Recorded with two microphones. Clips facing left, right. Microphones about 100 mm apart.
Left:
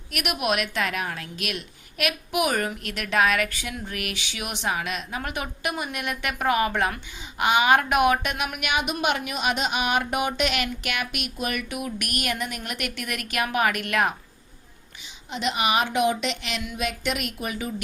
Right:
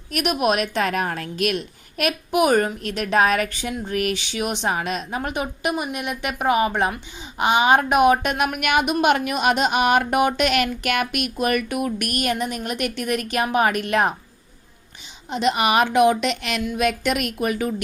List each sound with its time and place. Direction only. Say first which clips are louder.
0.1 s a woman's voice: right 5 dB; 35° right (ahead or behind)
8.2 s speech: right 7 dB; 40° right (ahead or behind)
15.3 s speech: right 5 dB; 45° right (ahead or behind)